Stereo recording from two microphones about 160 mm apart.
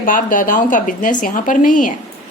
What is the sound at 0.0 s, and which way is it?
A woman's voice, 60° left (ahead or behind).